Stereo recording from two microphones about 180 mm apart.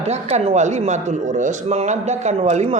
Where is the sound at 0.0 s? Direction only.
35° right (ahead or behind).